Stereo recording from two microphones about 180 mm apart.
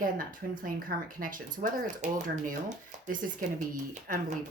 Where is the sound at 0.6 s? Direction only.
50° right (ahead or behind).